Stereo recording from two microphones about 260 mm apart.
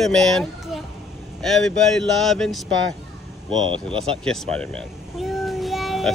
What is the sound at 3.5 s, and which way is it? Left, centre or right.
Speech, centre.